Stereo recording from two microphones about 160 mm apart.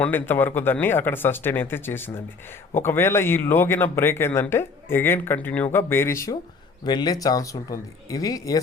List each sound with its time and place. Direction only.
0.0 s speech: 10° left (ahead or behind)